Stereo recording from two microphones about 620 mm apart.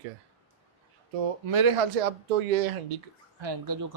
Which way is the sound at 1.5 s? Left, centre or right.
Right.